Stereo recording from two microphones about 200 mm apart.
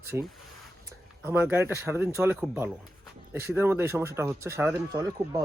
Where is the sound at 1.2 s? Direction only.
10° right (ahead or behind).